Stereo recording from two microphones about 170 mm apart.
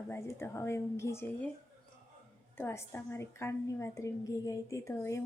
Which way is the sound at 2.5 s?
15° left (ahead or behind).